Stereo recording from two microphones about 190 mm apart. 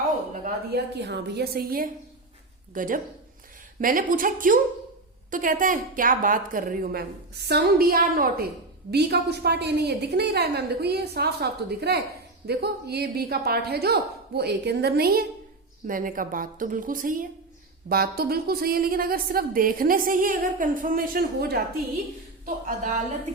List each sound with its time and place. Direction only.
0.9 s a woman's voice: 60° right (ahead or behind)
22.4 s a woman's voice: 40° right (ahead or behind)